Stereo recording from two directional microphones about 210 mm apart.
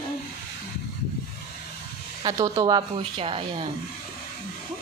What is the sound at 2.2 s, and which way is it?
A woman's voice, 15° right (ahead or behind).